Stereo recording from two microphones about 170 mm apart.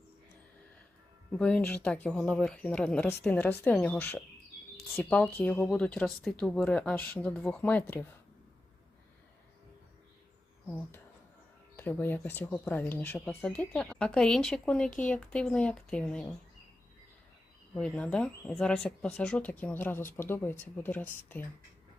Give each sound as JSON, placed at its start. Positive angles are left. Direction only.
{"t": 1.3, "sound": "speech", "side_deg": 5}
{"t": 10.7, "sound": "speech", "side_deg": 10}
{"t": 17.7, "sound": "speech", "side_deg": 5}